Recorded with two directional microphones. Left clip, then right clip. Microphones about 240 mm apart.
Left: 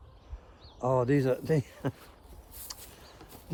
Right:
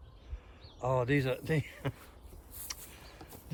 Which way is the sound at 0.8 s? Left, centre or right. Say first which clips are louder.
Left 4 dB; left.